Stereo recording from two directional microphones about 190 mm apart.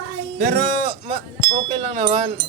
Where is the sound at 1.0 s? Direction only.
25° right (ahead or behind).